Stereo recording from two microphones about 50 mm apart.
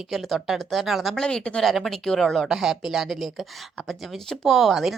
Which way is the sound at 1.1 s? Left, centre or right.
Centre.